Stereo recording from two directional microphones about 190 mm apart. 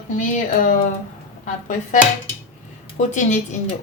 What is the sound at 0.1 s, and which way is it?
A woman's voice, 40° left (ahead or behind).